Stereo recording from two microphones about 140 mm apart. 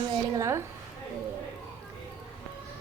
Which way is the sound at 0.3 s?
20° right (ahead or behind).